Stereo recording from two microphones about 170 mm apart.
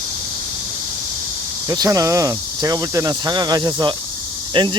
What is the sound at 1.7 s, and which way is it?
Speech, 20° right (ahead or behind).